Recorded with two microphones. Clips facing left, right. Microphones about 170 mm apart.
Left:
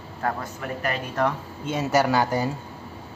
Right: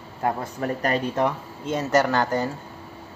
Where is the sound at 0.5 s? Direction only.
35° right (ahead or behind).